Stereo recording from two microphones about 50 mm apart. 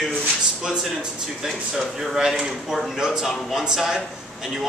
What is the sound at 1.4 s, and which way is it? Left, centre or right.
Speech, centre.